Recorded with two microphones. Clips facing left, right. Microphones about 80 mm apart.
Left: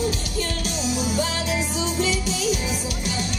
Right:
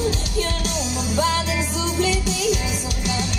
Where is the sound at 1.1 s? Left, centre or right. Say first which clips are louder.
Right 4 dB; right.